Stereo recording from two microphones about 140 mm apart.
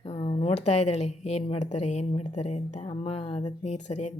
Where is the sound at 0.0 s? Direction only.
45° left (ahead or behind).